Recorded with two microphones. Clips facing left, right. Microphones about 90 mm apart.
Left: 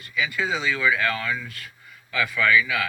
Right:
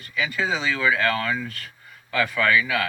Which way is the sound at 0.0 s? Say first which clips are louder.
Right 1 dB; 35° right (ahead or behind).